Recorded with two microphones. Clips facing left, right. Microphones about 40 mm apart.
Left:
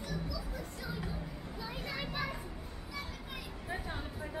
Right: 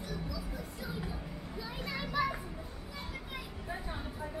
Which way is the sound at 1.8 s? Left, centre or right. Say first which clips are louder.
Right 6 dB; centre.